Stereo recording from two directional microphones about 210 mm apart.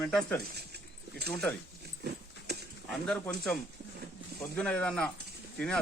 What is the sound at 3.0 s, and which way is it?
Speech, 5° left (ahead or behind).